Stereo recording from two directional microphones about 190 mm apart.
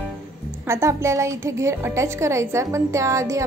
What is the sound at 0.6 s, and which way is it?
Speech, 15° right (ahead or behind).